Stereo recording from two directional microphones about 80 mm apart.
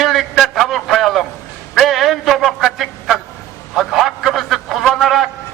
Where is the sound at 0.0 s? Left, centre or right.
Centre.